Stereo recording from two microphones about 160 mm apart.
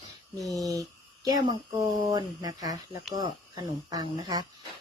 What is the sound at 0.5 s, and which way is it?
Speech, 20° right (ahead or behind).